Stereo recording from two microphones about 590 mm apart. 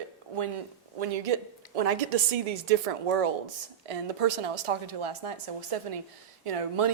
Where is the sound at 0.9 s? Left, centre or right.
Right.